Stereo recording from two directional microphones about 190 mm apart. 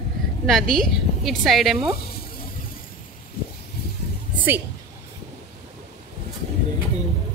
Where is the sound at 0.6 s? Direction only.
50° right (ahead or behind).